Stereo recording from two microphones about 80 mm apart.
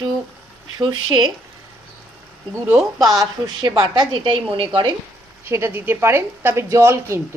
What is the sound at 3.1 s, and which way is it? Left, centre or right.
A woman's voice, right.